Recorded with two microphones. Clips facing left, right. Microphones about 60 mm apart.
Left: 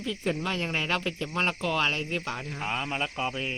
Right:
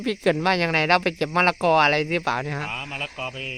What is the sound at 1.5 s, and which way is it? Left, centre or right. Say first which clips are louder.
Speech: right 10 dB; right.